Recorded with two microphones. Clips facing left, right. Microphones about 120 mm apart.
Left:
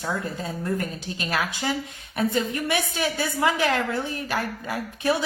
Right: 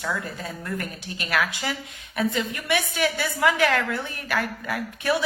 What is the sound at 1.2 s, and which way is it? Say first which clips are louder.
A woman's voice: right 1 dB; 25° left (ahead or behind).